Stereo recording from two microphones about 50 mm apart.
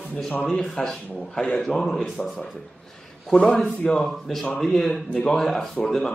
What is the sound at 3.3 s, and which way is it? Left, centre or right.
Speech, centre.